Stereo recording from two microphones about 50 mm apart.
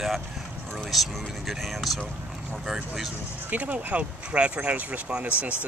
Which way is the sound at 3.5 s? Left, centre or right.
Right.